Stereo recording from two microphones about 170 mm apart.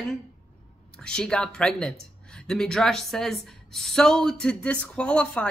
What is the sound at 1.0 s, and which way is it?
Speech, 5° left (ahead or behind).